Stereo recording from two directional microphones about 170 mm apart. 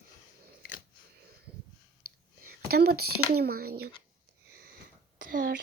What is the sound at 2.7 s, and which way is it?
Speech, 65° right (ahead or behind).